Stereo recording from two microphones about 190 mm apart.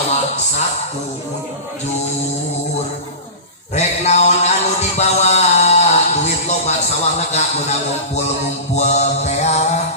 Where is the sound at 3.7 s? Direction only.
35° left (ahead or behind).